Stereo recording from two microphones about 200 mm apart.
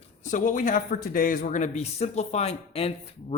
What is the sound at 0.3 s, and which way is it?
Speech, 40° left (ahead or behind).